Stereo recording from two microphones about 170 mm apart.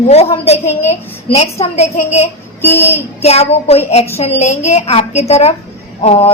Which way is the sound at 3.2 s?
40° left (ahead or behind).